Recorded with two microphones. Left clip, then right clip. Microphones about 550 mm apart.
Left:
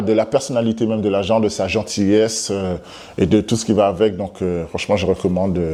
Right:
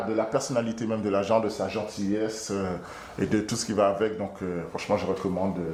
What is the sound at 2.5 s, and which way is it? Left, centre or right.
A man's voice, left.